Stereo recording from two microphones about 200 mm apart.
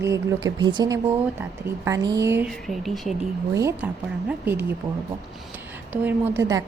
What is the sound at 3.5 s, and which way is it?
Speech, 15° right (ahead or behind).